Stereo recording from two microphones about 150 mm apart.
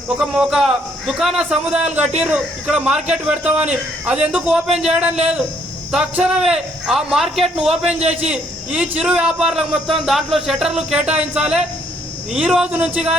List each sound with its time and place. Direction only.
0.2 s a man's voice: 5° right (ahead or behind)
7.9 s a man's voice: 45° right (ahead or behind)
8.3 s a man's voice: 5° right (ahead or behind)